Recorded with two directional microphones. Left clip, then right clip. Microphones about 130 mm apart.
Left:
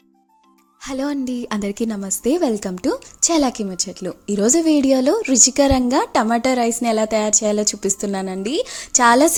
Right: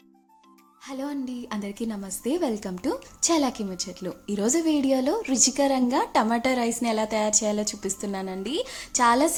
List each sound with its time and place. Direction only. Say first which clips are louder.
0.9 s a woman's voice: left 9 dB; 55° left (ahead or behind)